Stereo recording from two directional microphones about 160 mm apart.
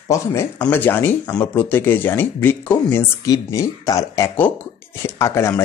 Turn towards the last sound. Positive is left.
turn(degrees=15)  # may be behind; listen again after turning